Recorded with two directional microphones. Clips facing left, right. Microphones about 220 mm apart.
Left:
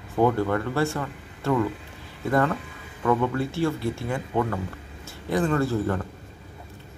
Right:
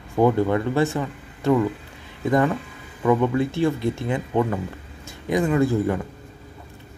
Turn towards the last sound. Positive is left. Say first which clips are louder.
# right 4 dB
turn(degrees=-15)  # may be behind; listen again after turning